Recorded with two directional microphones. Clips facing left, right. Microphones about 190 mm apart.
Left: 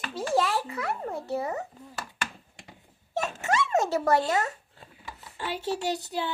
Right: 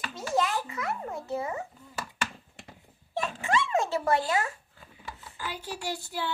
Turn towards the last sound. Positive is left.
turn(degrees=20)  # may be behind; listen again after turning